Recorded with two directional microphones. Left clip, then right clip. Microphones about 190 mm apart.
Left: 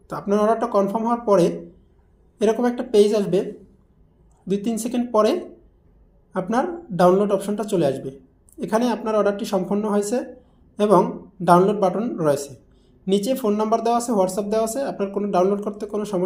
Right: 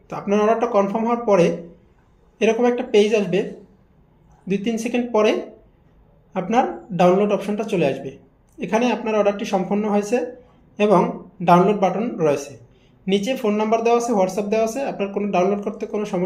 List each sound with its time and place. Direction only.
0.1 s speech: 35° left (ahead or behind)
4.4 s speech: 35° left (ahead or behind)